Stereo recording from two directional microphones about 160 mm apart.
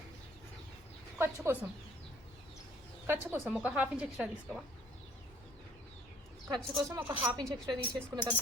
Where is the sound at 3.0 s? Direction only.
15° right (ahead or behind).